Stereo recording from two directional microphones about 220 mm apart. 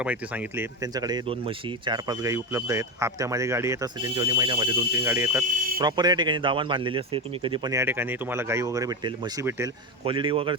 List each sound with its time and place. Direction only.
0.0 s speech: 5° right (ahead or behind)
10.0 s speech: 25° right (ahead or behind)